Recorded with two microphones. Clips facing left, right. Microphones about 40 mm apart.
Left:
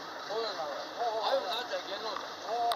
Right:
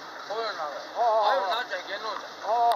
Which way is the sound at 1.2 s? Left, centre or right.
Right.